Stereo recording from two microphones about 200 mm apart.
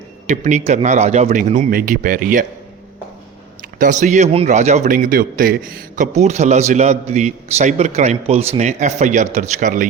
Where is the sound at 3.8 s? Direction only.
40° right (ahead or behind).